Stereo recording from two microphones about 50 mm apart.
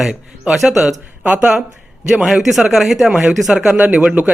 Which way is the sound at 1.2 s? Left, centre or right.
Right.